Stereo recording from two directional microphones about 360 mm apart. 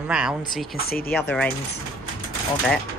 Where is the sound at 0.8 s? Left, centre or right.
Left.